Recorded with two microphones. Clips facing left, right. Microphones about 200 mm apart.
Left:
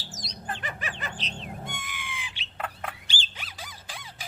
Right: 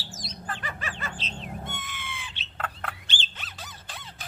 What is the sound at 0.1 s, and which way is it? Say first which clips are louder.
Bird: left 1 dB; 20° left (ahead or behind).